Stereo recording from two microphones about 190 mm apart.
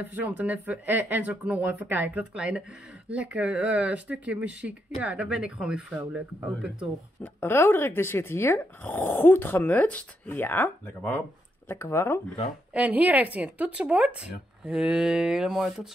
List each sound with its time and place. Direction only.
0.1 s speech: 10° right (ahead or behind)
7.3 s speech: 10° left (ahead or behind)
12.7 s speech: 10° right (ahead or behind)